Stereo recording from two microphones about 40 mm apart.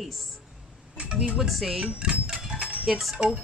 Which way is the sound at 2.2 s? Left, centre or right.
Centre.